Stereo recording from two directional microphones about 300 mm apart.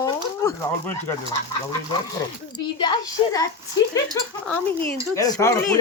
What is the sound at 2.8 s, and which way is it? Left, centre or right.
Speech, centre.